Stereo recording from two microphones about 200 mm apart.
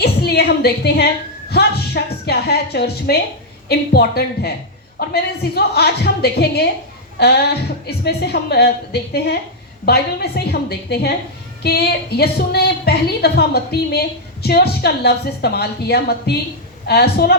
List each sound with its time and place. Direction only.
0.0 s a woman's voice: 55° left (ahead or behind)